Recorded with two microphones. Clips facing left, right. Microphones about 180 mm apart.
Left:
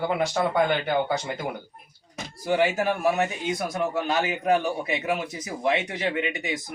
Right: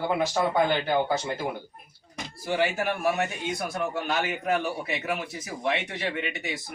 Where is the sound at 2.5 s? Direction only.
15° left (ahead or behind).